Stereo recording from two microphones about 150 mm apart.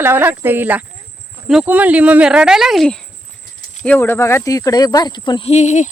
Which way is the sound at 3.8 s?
15° left (ahead or behind).